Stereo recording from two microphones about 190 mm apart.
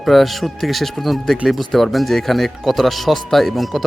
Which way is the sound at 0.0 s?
Centre (ahead or behind).